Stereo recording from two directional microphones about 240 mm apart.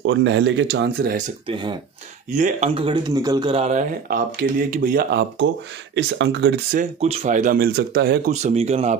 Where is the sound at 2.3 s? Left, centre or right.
Right.